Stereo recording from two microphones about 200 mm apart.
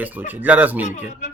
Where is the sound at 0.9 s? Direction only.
35° left (ahead or behind).